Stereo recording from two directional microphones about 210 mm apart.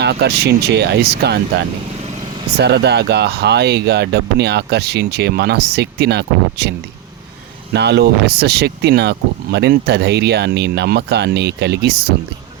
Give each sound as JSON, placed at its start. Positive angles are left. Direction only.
{"t": 0.0, "sound": "speech", "side_deg": -50}
{"t": 2.6, "sound": "speech", "side_deg": -50}